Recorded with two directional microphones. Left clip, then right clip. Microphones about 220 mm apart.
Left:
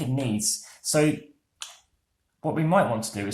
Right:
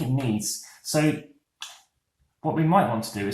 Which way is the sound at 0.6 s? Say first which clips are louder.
Left 3 dB; 45° left (ahead or behind).